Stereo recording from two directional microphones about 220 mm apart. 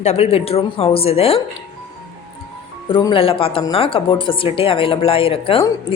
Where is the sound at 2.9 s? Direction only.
20° left (ahead or behind).